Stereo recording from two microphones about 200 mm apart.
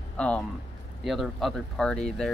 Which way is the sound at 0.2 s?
5° left (ahead or behind).